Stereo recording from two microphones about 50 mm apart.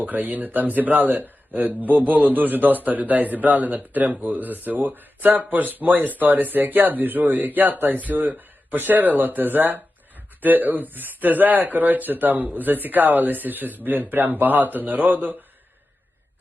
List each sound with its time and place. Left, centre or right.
0.0 s a man's voice: right